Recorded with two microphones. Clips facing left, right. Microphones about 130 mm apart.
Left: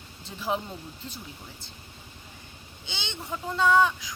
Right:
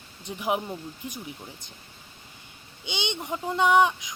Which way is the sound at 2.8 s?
20° right (ahead or behind).